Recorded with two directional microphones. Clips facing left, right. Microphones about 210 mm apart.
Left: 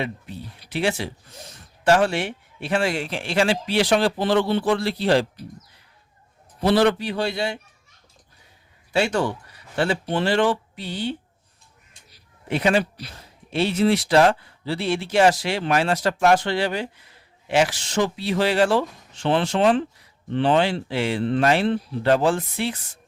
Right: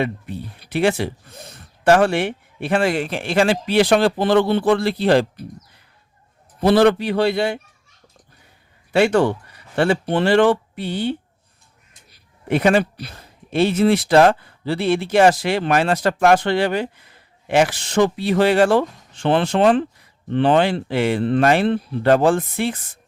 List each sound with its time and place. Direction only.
0.0 s speech: 55° right (ahead or behind)
6.6 s speech: 55° right (ahead or behind)
9.0 s speech: 60° right (ahead or behind)
12.5 s speech: 55° right (ahead or behind)